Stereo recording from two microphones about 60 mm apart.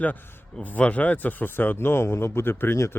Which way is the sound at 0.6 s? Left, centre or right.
Left.